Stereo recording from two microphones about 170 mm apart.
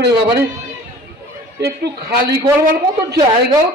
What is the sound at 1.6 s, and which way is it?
Speech, 70° right (ahead or behind).